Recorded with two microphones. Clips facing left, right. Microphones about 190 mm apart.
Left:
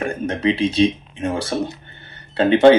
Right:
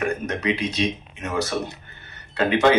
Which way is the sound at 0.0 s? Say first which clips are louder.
Left 4 dB; 30° left (ahead or behind).